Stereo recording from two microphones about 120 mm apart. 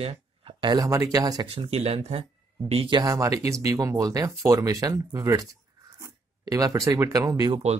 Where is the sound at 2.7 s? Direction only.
45° right (ahead or behind).